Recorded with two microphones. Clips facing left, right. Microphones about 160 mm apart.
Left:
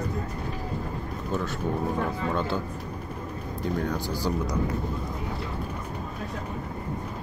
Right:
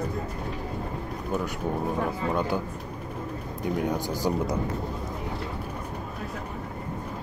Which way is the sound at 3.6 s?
15° right (ahead or behind).